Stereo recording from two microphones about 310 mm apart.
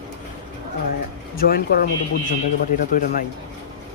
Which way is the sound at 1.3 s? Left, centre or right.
Left.